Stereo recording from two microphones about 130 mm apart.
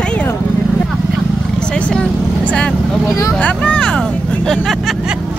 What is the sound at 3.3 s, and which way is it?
Speech, 10° left (ahead or behind).